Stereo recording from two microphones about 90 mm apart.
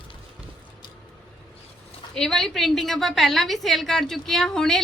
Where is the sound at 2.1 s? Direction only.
5° left (ahead or behind).